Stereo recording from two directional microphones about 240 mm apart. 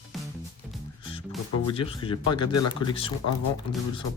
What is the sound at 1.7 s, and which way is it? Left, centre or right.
Speech, left.